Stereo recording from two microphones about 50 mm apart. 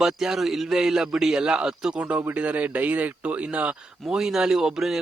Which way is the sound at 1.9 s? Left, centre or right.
Right.